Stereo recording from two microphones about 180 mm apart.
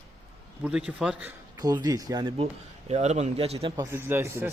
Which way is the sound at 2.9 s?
40° right (ahead or behind).